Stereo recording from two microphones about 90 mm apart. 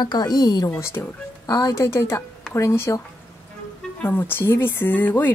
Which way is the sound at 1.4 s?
45° left (ahead or behind).